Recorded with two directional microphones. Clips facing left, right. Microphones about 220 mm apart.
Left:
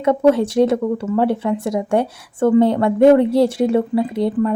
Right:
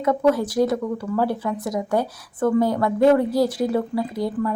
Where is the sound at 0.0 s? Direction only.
30° left (ahead or behind).